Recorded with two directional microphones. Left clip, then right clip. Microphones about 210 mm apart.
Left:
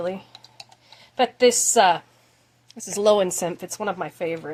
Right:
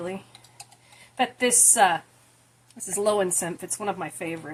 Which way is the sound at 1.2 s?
45° left (ahead or behind).